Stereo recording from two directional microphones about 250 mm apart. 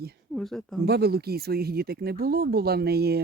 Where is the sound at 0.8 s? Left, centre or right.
Right.